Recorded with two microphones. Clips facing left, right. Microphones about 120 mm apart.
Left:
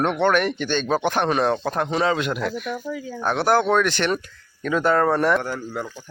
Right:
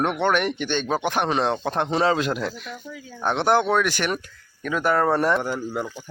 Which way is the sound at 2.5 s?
65° left (ahead or behind).